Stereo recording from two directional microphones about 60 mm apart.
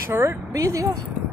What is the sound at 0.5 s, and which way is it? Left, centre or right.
Speech, right.